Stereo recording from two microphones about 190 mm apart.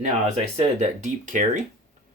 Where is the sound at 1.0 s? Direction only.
40° right (ahead or behind).